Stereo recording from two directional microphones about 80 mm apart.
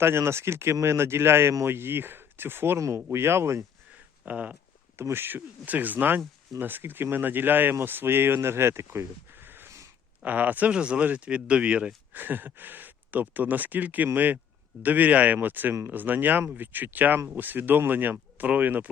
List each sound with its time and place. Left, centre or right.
0.0 s speech: right
4.3 s speech: centre
4.9 s speech: right
9.4 s a sound: right
10.2 s speech: centre